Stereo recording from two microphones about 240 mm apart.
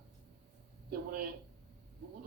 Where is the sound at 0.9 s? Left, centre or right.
Right.